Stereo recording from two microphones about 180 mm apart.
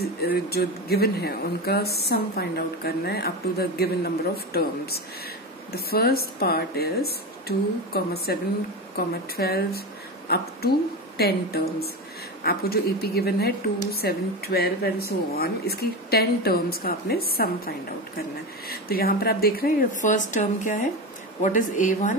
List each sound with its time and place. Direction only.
0.0 s a woman's voice: 60° left (ahead or behind); by 22.1 s 45° left (ahead or behind)